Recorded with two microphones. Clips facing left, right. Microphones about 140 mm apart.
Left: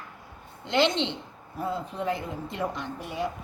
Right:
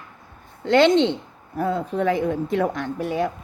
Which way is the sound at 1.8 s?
70° right (ahead or behind).